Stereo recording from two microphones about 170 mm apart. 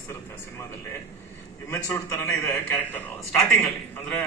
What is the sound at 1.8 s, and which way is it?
A man's voice, 20° left (ahead or behind).